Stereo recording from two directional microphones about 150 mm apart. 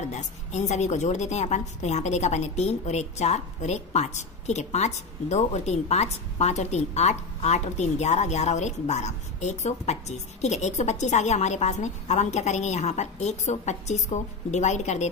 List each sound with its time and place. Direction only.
0.1 s a woman's voice: 50° left (ahead or behind)